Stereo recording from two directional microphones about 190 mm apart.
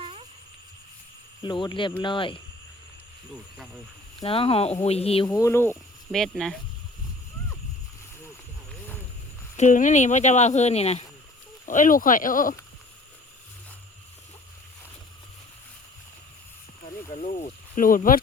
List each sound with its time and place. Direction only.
0.0 s a sound: 30° right (ahead or behind)
1.4 s speech: 25° left (ahead or behind)
4.2 s speech: 30° left (ahead or behind); by 5.7 s 10° left (ahead or behind)
6.1 s speech: centre (ahead or behind)
9.6 s speech: 40° left (ahead or behind)
17.7 s speech: 45° left (ahead or behind)